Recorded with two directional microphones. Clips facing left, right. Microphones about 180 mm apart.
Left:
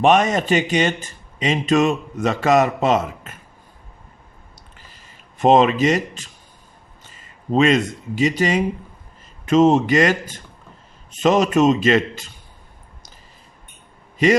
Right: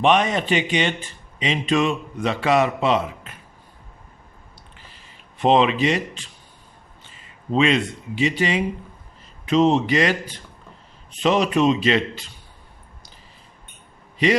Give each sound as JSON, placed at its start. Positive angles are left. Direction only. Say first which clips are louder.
{"t": 0.0, "sound": "a man's voice", "louder": "left 3 dB", "side_deg": 45}
{"t": 4.9, "sound": "a man's voice", "louder": "even", "side_deg": 45}
{"t": 14.2, "sound": "a man's voice", "louder": "left 3 dB", "side_deg": 45}